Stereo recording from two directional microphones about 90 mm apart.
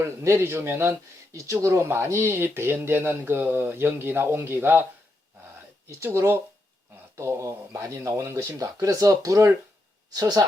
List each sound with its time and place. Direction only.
0.0 s speech: 30° right (ahead or behind)
6.0 s speech: 25° right (ahead or behind); by 10.4 s 45° right (ahead or behind)